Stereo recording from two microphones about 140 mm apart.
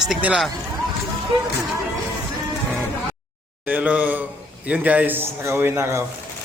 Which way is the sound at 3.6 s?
10° right (ahead or behind).